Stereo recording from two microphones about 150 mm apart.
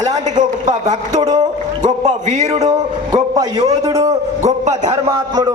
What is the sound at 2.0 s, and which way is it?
Speech, 55° right (ahead or behind).